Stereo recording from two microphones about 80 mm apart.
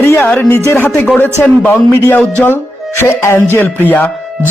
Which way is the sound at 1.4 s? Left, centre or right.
Left.